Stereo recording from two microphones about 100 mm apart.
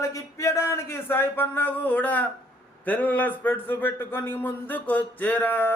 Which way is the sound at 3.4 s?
20° left (ahead or behind).